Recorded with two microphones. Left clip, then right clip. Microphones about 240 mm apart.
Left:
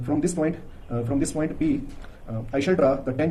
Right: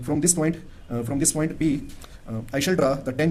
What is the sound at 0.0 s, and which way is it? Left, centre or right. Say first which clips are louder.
Speech: right 1 dB; right.